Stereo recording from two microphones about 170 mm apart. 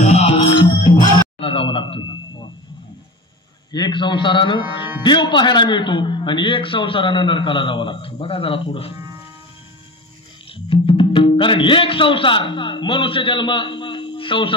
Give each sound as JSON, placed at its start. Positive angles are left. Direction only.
{"t": 0.0, "sound": "music", "side_deg": 40}
{"t": 1.4, "sound": "a sound", "side_deg": 30}
{"t": 3.7, "sound": "a man's voice", "side_deg": 25}
{"t": 10.5, "sound": "speech", "side_deg": 30}